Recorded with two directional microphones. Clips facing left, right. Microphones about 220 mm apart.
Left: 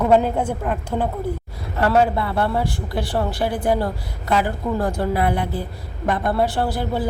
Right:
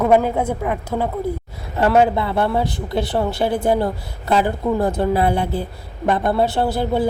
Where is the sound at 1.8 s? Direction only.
20° right (ahead or behind).